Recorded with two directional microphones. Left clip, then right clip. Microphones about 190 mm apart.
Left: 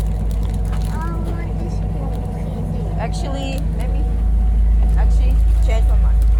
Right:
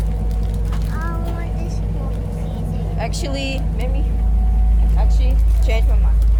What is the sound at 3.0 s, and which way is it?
Vehicle, 40° right (ahead or behind).